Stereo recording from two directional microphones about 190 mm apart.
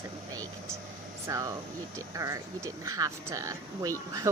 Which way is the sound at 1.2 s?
15° right (ahead or behind).